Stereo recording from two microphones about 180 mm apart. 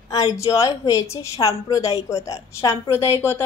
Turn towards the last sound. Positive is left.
turn(degrees=15)  # may be behind; listen again after turning